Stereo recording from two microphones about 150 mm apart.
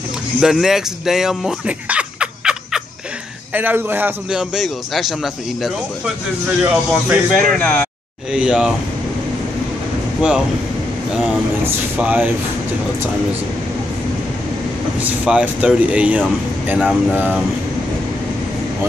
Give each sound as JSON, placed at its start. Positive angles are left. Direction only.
{"t": 0.4, "sound": "a man's voice", "side_deg": -5}
{"t": 8.3, "sound": "a man's voice", "side_deg": -5}
{"t": 11.6, "sound": "speech", "side_deg": -10}
{"t": 15.0, "sound": "speech", "side_deg": -10}